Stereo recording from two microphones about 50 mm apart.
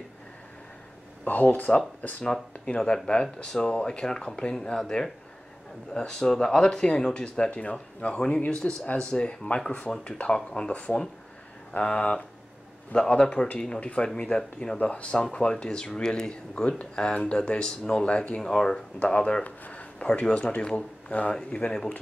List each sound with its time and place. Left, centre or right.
1.2 s speech: left
2.6 s speech: centre
14.0 s speech: centre
19.4 s a sound: left
20.3 s speech: left